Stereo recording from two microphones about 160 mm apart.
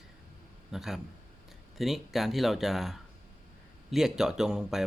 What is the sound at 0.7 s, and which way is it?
A man's voice, centre (ahead or behind).